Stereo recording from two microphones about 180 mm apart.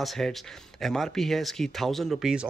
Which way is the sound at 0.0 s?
Centre (ahead or behind).